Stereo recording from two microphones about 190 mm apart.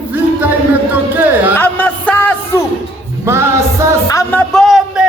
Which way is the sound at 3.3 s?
15° right (ahead or behind).